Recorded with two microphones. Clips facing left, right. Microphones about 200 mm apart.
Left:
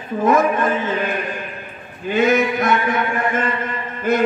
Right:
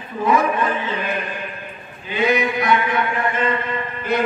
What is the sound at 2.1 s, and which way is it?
Chant, 45° left (ahead or behind).